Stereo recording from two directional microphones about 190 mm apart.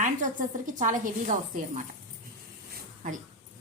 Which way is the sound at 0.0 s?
40° right (ahead or behind).